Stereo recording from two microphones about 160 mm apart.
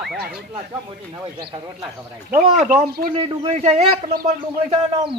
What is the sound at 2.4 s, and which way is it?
Speech, 45° right (ahead or behind).